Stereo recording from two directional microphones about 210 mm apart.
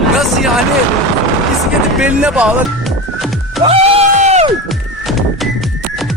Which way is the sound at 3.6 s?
30° right (ahead or behind).